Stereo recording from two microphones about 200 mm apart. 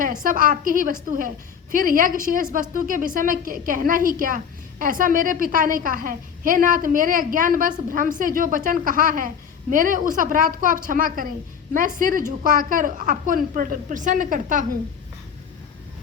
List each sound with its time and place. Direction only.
0.0 s a woman's voice: 45° right (ahead or behind)